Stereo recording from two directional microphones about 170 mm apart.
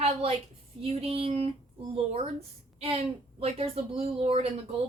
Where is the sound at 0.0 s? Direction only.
35° right (ahead or behind).